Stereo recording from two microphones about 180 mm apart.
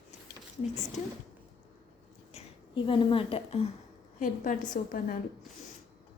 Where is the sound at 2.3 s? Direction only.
30° left (ahead or behind).